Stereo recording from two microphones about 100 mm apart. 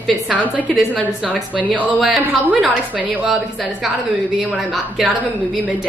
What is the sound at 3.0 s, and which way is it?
Speech, 15° right (ahead or behind).